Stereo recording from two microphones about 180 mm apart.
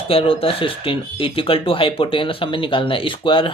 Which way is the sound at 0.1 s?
30° left (ahead or behind).